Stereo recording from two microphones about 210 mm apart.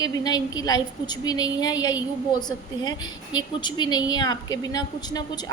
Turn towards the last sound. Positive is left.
turn(degrees=20)  # may be behind; listen again after turning